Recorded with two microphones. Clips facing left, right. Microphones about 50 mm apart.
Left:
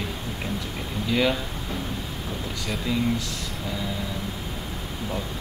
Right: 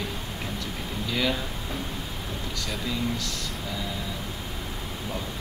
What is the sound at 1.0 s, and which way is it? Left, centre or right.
Speech, centre.